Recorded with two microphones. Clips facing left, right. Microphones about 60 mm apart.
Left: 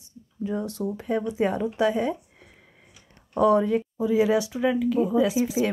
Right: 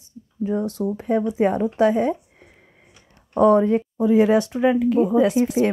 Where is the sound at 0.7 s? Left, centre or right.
Right.